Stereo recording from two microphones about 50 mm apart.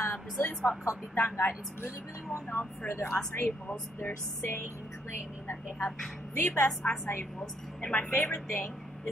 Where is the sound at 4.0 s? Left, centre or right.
Left.